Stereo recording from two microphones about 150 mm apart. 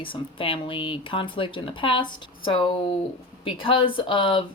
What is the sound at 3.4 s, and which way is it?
Speech, 35° left (ahead or behind).